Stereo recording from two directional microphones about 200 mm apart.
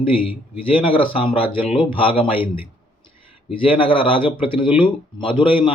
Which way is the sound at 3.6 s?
25° left (ahead or behind).